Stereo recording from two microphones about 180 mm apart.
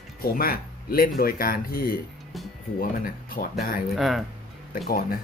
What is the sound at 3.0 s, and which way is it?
Speech, 55° left (ahead or behind).